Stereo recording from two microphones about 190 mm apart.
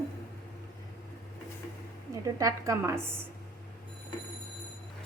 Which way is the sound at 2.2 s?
15° right (ahead or behind).